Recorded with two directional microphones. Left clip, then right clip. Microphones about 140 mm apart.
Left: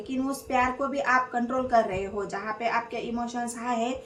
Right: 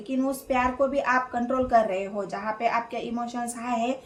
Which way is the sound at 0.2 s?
40° right (ahead or behind).